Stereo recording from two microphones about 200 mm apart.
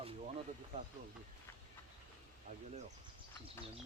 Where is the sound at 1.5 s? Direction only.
15° left (ahead or behind).